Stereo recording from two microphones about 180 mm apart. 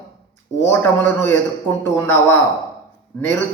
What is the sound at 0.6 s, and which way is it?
Speech, 10° left (ahead or behind).